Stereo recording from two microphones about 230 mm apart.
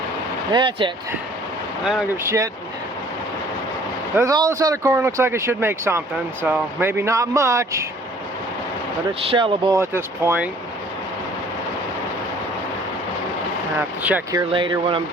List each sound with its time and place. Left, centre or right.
0.5 s speech: right
1.8 s speech: centre
2.2 s speech: centre
4.2 s speech: centre
9.3 s speech: right
13.7 s speech: centre
14.5 s speech: right